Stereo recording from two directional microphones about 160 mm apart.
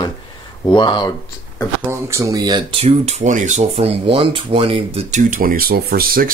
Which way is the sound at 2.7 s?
35° right (ahead or behind).